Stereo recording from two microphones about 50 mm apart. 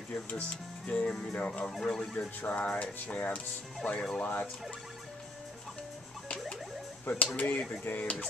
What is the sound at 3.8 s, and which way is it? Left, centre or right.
Emergency vehicle, left.